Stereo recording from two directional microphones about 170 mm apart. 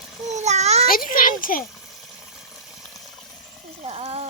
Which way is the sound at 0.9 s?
55° left (ahead or behind).